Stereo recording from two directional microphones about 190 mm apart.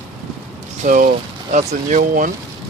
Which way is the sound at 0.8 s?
45° right (ahead or behind).